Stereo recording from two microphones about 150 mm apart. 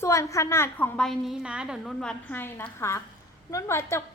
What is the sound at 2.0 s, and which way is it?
A woman's voice, 5° left (ahead or behind).